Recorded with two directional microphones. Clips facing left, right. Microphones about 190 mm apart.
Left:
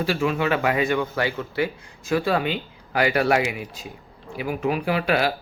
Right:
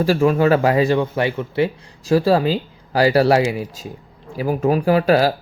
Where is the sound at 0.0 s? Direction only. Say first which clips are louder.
Right 7 dB; 40° right (ahead or behind).